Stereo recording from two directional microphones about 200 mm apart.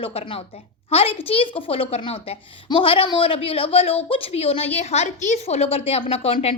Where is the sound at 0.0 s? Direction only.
30° left (ahead or behind).